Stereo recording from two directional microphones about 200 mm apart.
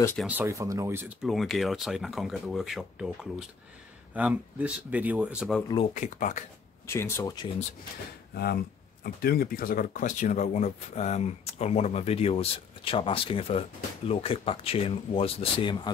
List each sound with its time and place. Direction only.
0.2 s speech: 10° right (ahead or behind)
5.6 s speech: 20° left (ahead or behind)
5.9 s speech: 40° left (ahead or behind)
6.9 s speech: 15° left (ahead or behind)
9.0 s speech: 50° left (ahead or behind); by 15.9 s 25° left (ahead or behind)